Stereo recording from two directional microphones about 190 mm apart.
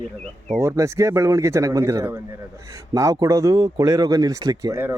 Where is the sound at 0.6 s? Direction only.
15° right (ahead or behind).